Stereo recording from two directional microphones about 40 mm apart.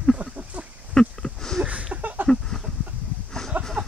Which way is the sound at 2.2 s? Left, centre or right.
Centre.